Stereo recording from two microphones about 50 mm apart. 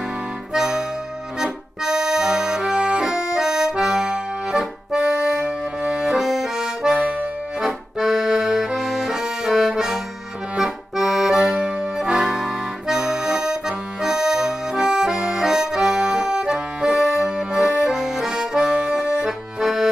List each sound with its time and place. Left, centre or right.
0.5 s music: centre
1.4 s accordion: centre
7.0 s accordion: right
7.6 s accordion: centre
11.3 s accordion: centre